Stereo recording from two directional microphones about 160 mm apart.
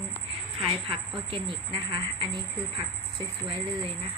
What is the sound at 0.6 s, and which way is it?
Speech, 35° right (ahead or behind).